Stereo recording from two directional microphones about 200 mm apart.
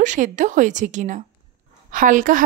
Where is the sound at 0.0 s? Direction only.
40° right (ahead or behind).